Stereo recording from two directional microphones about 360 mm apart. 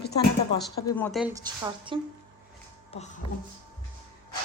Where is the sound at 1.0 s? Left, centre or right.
Centre.